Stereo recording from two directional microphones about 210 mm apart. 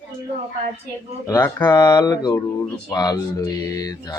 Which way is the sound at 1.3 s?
10° left (ahead or behind).